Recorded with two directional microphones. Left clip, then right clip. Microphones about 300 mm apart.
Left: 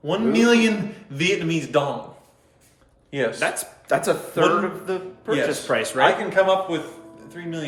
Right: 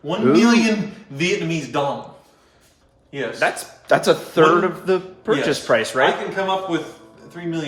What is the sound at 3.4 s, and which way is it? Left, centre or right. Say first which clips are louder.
Speech: right 7 dB; centre.